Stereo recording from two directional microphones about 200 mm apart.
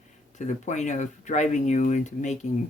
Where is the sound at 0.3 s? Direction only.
35° left (ahead or behind).